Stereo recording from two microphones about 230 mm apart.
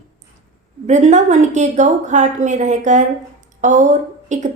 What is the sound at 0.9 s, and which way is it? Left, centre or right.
A woman's voice, right.